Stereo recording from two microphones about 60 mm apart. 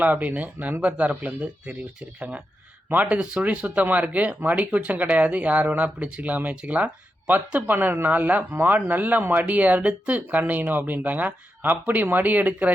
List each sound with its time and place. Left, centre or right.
0.0 s speech: right